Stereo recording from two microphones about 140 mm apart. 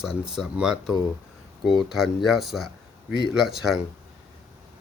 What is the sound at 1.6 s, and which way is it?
Speech, 35° left (ahead or behind).